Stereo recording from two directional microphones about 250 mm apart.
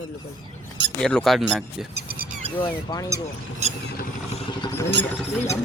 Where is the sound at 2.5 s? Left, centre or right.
Centre.